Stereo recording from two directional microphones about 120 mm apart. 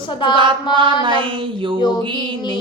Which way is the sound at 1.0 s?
45° right (ahead or behind).